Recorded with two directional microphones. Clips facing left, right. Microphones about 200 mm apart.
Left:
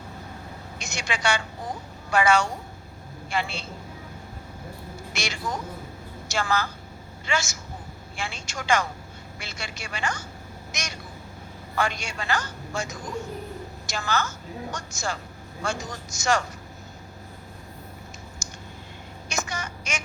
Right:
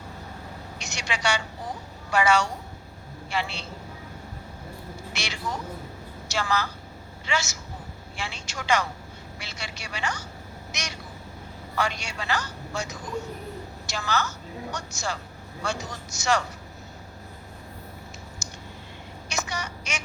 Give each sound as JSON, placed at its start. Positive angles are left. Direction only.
{"t": 0.8, "sound": "a sound", "side_deg": 50}
{"t": 2.1, "sound": "a woman's voice", "side_deg": 50}
{"t": 5.1, "sound": "a woman's voice", "side_deg": 50}
{"t": 10.7, "sound": "quack", "side_deg": 50}
{"t": 11.8, "sound": "a woman's voice", "side_deg": 50}
{"t": 19.3, "sound": "telephone", "side_deg": 50}